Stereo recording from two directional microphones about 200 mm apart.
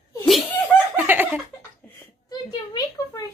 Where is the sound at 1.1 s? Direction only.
10° right (ahead or behind).